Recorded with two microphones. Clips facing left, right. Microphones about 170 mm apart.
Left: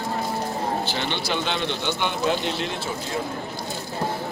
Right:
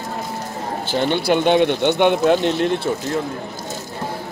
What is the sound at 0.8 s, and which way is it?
Speech, 45° right (ahead or behind).